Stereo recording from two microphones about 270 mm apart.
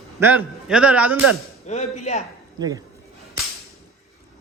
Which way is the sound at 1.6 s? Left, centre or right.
Left.